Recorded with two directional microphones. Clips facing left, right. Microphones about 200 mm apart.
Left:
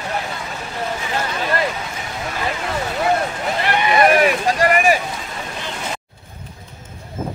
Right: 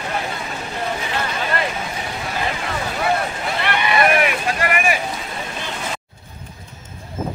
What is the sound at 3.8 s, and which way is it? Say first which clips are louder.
Vehicle: left 4 dB; 35° left (ahead or behind).